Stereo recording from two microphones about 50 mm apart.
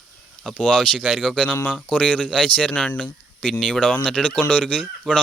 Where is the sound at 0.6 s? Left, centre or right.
Left.